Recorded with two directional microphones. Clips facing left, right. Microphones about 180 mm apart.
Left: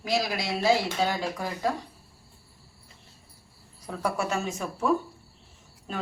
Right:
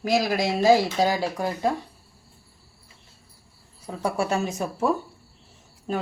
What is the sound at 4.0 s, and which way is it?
Speech, 35° right (ahead or behind).